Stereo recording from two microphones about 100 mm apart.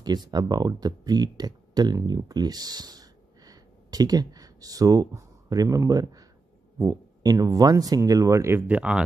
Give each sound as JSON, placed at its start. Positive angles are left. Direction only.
{"t": 0.0, "sound": "speech", "side_deg": -45}
{"t": 8.6, "sound": "speech", "side_deg": -10}